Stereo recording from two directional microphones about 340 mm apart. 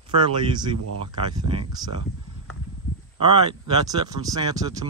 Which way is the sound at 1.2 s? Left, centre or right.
Centre.